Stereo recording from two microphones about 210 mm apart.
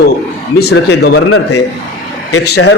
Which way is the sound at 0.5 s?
50° left (ahead or behind).